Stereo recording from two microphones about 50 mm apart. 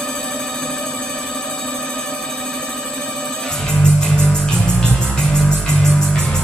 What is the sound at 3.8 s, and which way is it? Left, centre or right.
Music, centre.